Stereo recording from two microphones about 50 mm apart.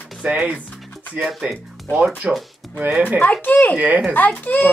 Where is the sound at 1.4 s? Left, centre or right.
Centre.